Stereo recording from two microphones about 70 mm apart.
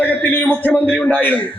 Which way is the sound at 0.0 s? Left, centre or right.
Left.